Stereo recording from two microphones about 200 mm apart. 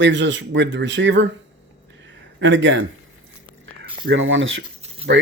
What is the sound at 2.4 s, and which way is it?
Speech, 70° right (ahead or behind).